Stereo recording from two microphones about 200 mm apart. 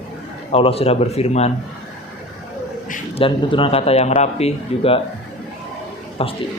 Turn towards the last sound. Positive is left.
turn(degrees=30)  # may be behind; listen again after turning